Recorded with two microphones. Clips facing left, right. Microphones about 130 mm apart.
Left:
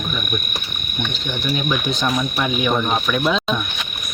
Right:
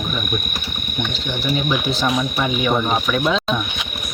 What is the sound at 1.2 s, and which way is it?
Speech, 15° right (ahead or behind).